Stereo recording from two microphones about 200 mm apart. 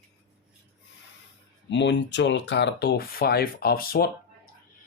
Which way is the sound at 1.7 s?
60° left (ahead or behind).